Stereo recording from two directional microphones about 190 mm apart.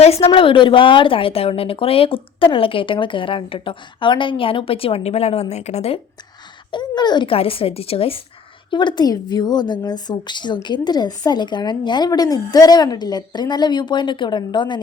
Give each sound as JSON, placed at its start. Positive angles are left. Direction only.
{"t": 0.0, "sound": "a woman's voice", "side_deg": 30}
{"t": 6.7, "sound": "a woman's voice", "side_deg": 25}